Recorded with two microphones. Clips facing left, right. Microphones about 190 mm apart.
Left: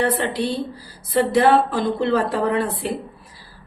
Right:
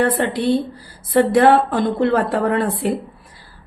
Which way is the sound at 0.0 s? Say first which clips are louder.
Right 3 dB; 55° right (ahead or behind).